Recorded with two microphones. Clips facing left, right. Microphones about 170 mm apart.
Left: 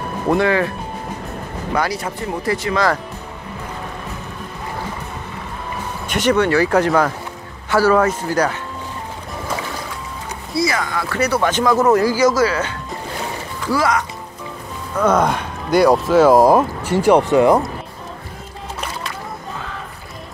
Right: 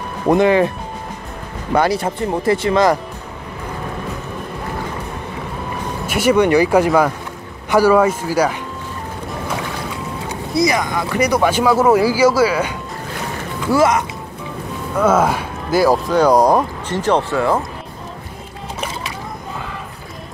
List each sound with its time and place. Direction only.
0.3 s speech: 20° right (ahead or behind)
1.8 s speech: 30° right (ahead or behind)
6.0 s speech: 10° right (ahead or behind)
10.5 s speech: 15° right (ahead or behind)
13.7 s speech: 25° right (ahead or behind)
15.0 s speech: 5° right (ahead or behind); by 17.6 s 15° left (ahead or behind)